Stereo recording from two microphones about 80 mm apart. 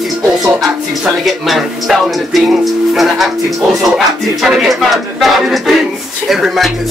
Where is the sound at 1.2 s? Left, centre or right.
Centre.